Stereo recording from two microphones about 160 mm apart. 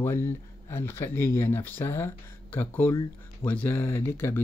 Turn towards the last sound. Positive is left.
turn(degrees=15)  # may be behind; listen again after turning